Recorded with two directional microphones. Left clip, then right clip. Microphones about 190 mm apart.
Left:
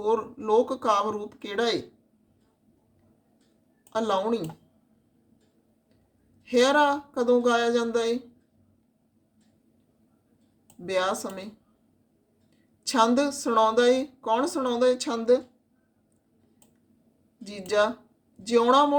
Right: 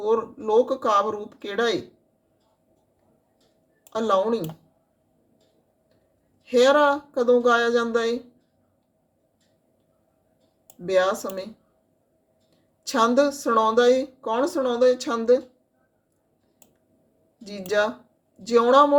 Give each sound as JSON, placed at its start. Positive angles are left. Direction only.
{"t": 0.0, "sound": "speech", "side_deg": 10}
{"t": 3.9, "sound": "speech", "side_deg": 10}
{"t": 6.4, "sound": "speech", "side_deg": 10}
{"t": 10.8, "sound": "speech", "side_deg": 10}
{"t": 12.8, "sound": "speech", "side_deg": 10}
{"t": 17.4, "sound": "speech", "side_deg": 10}